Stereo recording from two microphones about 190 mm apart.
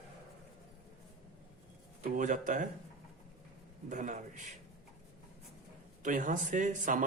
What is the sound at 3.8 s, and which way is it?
Speech, 40° right (ahead or behind).